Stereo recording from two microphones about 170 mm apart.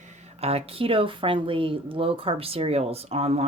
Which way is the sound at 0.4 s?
35° right (ahead or behind).